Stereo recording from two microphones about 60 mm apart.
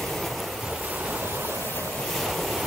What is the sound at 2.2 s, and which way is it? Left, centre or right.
Waves, centre.